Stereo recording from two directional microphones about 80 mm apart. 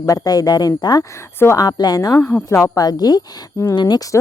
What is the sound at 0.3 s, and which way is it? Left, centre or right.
A woman's voice, left.